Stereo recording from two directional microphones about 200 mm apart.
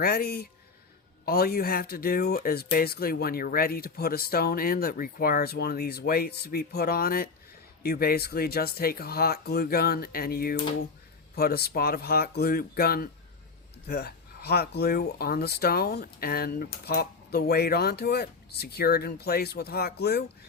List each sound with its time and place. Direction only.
0.0 s speech: 50° left (ahead or behind)